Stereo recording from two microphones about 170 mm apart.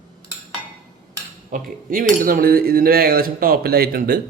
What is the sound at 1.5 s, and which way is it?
Cutlery, 55° right (ahead or behind).